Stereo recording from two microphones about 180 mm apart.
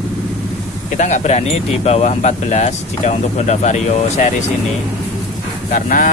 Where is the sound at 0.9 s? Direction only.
40° left (ahead or behind).